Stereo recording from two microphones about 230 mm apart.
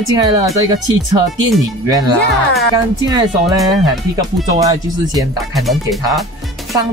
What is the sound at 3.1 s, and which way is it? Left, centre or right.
Speech, centre.